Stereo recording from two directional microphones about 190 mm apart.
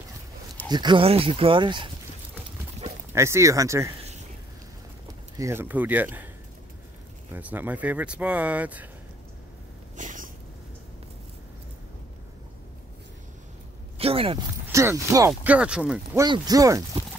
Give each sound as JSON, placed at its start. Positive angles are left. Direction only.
{"t": 0.7, "sound": "speech", "side_deg": -25}
{"t": 3.1, "sound": "speech", "side_deg": -15}
{"t": 5.4, "sound": "speech", "side_deg": -10}
{"t": 7.3, "sound": "speech", "side_deg": -10}
{"t": 9.9, "sound": "a sound", "side_deg": -45}
{"t": 13.9, "sound": "a sound", "side_deg": -30}
{"t": 14.7, "sound": "speech", "side_deg": -15}
{"t": 16.3, "sound": "speech", "side_deg": -20}